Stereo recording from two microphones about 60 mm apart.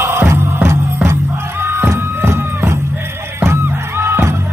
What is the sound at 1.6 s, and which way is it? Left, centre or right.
Music, right.